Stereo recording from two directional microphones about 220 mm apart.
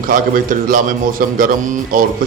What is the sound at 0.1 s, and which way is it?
A man's voice, 40° right (ahead or behind).